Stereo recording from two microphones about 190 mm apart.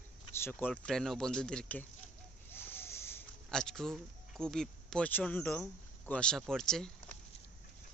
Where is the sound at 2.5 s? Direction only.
10° left (ahead or behind).